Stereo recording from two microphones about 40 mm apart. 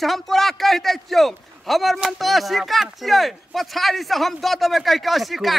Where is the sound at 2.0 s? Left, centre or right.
Centre.